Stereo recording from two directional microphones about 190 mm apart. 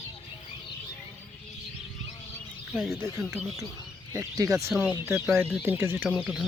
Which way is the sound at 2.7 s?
Centre (ahead or behind).